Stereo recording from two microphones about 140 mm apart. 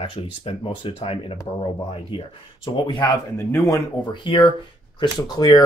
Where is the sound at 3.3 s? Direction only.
20° left (ahead or behind).